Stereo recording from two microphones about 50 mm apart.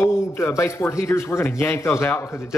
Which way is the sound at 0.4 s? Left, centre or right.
Left.